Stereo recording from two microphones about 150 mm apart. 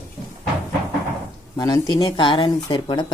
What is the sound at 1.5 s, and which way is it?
Speech, 25° left (ahead or behind).